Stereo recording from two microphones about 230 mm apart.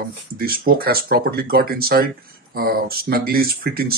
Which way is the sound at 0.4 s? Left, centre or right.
Right.